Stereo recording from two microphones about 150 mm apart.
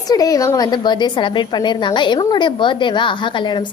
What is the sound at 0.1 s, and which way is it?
A woman's voice, 25° left (ahead or behind).